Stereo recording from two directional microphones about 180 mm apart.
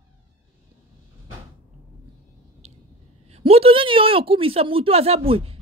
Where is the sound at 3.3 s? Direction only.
35° right (ahead or behind).